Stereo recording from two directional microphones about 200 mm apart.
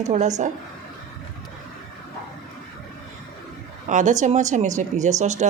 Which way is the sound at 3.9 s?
40° right (ahead or behind).